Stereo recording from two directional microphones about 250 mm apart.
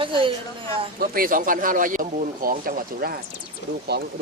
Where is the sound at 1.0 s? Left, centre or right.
Right.